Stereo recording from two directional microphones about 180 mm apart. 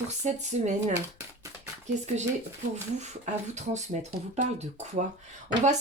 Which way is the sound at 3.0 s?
40° right (ahead or behind).